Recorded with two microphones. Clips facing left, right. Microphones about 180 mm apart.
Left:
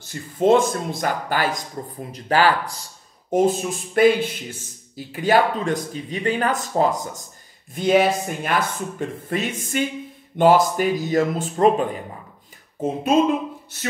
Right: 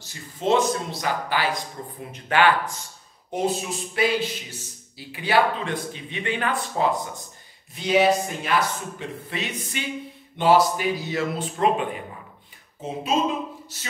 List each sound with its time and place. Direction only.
0.0 s a man's voice: 50° left (ahead or behind)
2.1 s a man's voice: 35° left (ahead or behind)